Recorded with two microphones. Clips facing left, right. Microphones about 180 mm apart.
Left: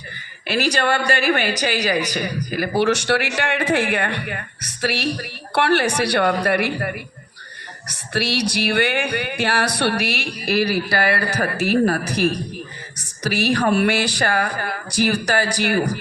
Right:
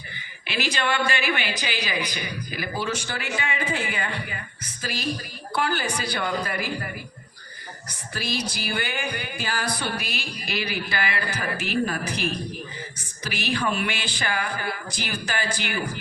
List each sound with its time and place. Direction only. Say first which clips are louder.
0.4 s a woman's voice: left 7 dB; 40° left (ahead or behind)
2.7 s speech: left 12 dB; 75° left (ahead or behind)
14.4 s a woman's voice: left 4 dB; 45° left (ahead or behind)
14.8 s speech: left 11 dB; 70° left (ahead or behind)